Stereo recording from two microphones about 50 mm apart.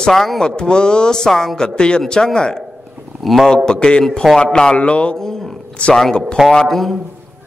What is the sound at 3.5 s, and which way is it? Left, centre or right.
A man's voice, centre.